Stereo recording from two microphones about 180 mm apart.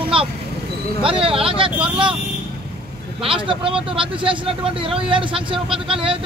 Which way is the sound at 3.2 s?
30° right (ahead or behind).